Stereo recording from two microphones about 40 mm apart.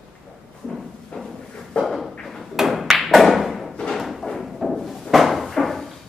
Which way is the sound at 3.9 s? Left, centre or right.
Centre.